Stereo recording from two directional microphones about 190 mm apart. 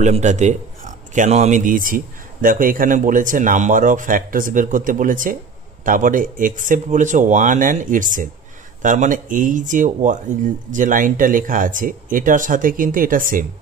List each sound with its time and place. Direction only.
0.0 s speech: 40° right (ahead or behind)